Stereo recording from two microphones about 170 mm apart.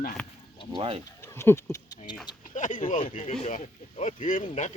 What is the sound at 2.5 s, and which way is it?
Speech, 50° left (ahead or behind).